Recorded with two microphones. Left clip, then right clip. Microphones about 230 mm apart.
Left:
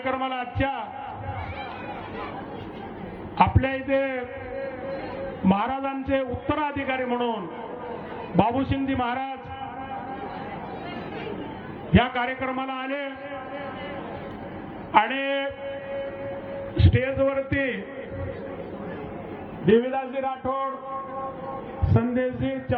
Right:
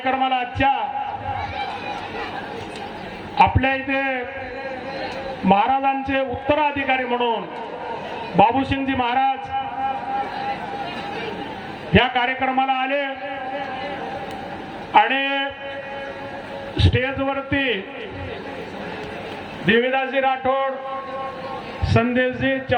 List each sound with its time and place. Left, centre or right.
0.0 s a man's voice: centre
3.3 s a man's voice: centre
5.5 s a man's voice: centre
8.4 s a man's voice: centre
11.9 s a man's voice: centre
14.9 s a man's voice: centre
16.7 s a man's voice: centre
19.6 s a man's voice: left
21.9 s a man's voice: centre